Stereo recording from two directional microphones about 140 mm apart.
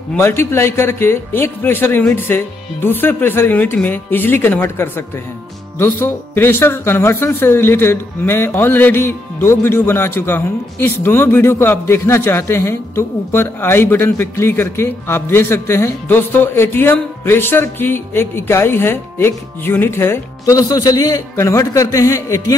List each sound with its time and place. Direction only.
0.1 s speech: 15° left (ahead or behind)